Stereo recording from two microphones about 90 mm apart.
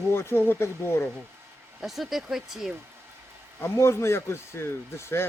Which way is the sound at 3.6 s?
30° left (ahead or behind).